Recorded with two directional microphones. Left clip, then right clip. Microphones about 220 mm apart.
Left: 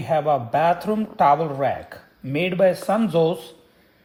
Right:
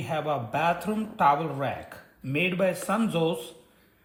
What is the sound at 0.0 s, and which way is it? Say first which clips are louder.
Speech: left 9 dB; 40° left (ahead or behind).